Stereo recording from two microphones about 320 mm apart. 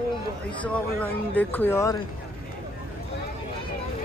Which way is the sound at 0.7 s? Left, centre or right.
Centre.